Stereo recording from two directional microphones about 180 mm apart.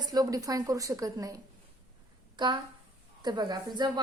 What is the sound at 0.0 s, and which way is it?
A woman's voice, 20° right (ahead or behind).